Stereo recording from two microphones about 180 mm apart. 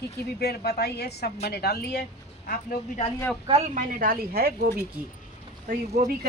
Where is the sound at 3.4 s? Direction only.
35° right (ahead or behind).